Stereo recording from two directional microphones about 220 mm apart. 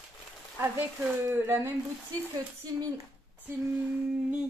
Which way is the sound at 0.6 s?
10° right (ahead or behind).